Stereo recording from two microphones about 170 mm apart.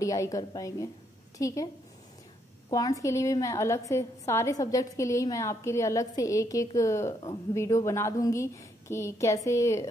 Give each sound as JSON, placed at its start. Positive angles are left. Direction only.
{"t": 0.0, "sound": "a woman's voice", "side_deg": 20}
{"t": 2.7, "sound": "a woman's voice", "side_deg": 20}